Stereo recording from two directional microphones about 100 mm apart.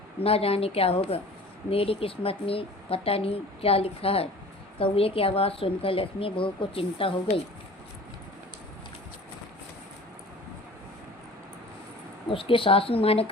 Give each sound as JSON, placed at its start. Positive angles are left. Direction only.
{"t": 0.2, "sound": "a woman's voice", "side_deg": 75}
{"t": 12.3, "sound": "a woman's voice", "side_deg": 65}